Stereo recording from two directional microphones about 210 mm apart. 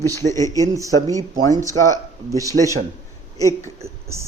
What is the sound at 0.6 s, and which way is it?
A man's voice, 15° right (ahead or behind).